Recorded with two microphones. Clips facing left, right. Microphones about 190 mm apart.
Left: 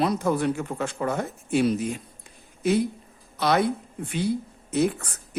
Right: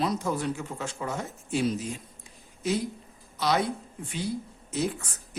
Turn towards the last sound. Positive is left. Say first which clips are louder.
# left 4 dB
turn(degrees=60)  # may be behind; listen again after turning